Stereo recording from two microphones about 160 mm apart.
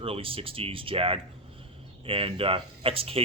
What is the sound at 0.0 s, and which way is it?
Speech, 35° right (ahead or behind).